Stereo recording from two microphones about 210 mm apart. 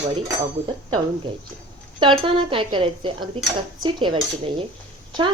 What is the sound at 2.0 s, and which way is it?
A woman's voice, 25° right (ahead or behind).